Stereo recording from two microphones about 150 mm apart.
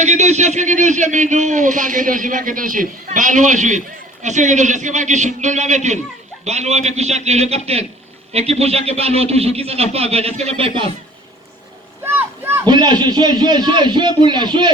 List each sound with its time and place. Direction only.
0.0 s speech: 50° right (ahead or behind)
12.0 s a sound: 15° right (ahead or behind)
12.6 s a man's voice: 30° right (ahead or behind)